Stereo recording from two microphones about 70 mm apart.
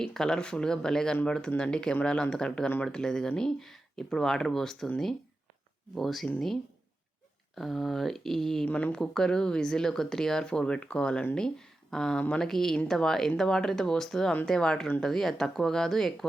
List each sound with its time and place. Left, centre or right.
0.0 s speech: centre
5.9 s speech: centre
7.5 s speech: centre
8.6 s speech: centre